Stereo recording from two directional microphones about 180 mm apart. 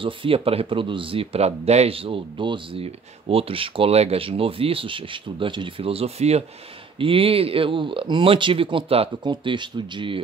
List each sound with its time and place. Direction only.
0.0 s speech: 30° right (ahead or behind)